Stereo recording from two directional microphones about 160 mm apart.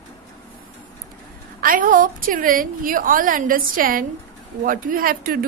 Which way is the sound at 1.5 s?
60° right (ahead or behind).